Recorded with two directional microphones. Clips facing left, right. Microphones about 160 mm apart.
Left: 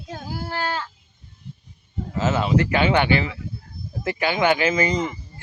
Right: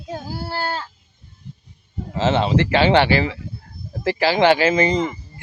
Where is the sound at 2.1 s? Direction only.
30° right (ahead or behind).